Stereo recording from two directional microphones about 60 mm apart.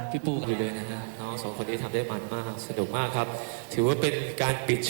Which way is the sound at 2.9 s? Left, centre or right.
Left.